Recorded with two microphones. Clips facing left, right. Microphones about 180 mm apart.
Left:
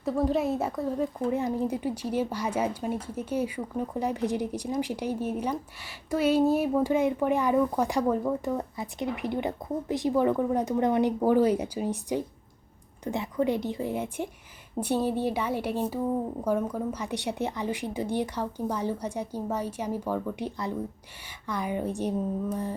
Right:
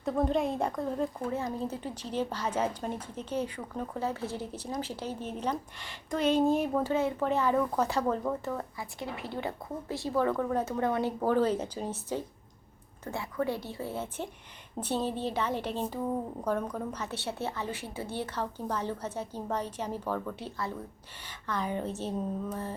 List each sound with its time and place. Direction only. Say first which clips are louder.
0.0 s speech: left 2 dB; 5° left (ahead or behind)
1.3 s a woman's voice: left 6 dB; 15° left (ahead or behind)